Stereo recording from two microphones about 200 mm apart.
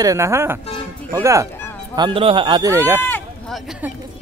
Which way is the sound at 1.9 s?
25° right (ahead or behind).